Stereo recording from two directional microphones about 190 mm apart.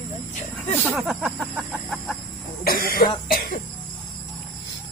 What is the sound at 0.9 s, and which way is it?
Chicken, centre (ahead or behind).